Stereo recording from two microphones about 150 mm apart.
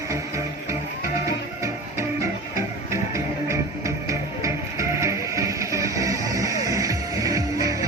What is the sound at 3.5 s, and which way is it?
Music, 20° right (ahead or behind).